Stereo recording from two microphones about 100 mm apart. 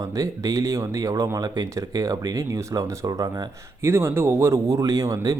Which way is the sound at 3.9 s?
25° right (ahead or behind).